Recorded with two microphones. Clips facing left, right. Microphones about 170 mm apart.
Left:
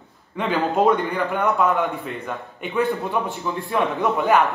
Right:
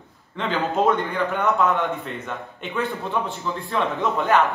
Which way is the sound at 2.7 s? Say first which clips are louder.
Left 4 dB; 20° left (ahead or behind).